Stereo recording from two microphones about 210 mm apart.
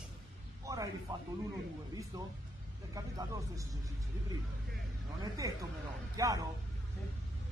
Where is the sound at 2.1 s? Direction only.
15° right (ahead or behind).